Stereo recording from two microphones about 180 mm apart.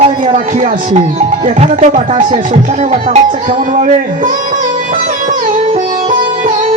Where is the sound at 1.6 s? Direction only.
45° right (ahead or behind).